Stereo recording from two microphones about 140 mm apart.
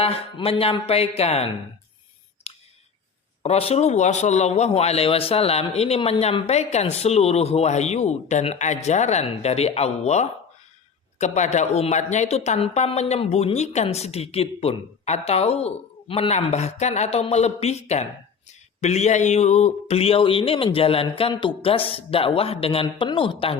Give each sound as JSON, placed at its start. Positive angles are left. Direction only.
{"t": 0.0, "sound": "speech", "side_deg": 45}
{"t": 2.5, "sound": "a sound", "side_deg": 45}
{"t": 3.4, "sound": "speech", "side_deg": 45}